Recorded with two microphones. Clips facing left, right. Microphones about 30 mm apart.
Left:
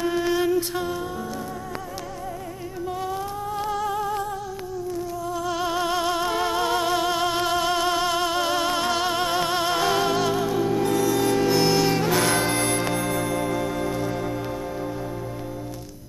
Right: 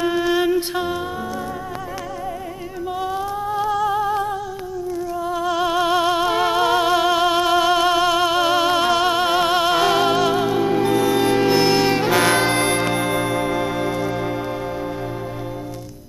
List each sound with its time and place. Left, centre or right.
0.3 s music: right
3.0 s music: right